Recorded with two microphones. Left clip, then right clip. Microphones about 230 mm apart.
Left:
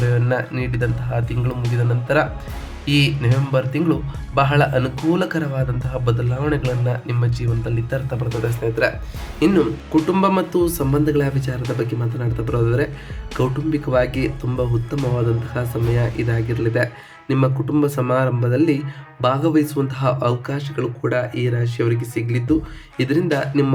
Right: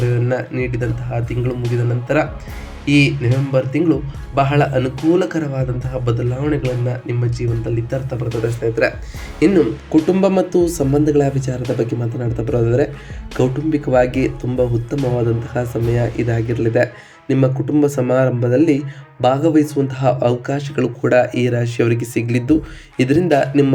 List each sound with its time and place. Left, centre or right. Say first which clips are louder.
0.0 s speech: right 1 dB; centre
20.7 s speech: right 7 dB; centre